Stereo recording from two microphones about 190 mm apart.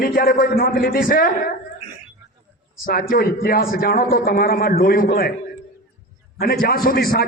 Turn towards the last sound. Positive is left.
turn(degrees=50)  # may be behind; listen again after turning